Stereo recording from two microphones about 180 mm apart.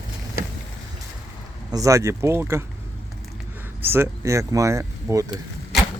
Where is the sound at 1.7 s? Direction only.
20° right (ahead or behind).